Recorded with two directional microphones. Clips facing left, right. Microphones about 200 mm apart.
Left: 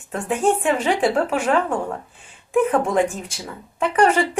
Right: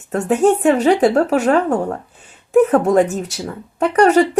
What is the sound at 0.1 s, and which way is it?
Speech, 40° right (ahead or behind).